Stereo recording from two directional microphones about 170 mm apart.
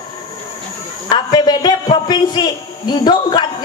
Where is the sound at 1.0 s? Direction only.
25° left (ahead or behind).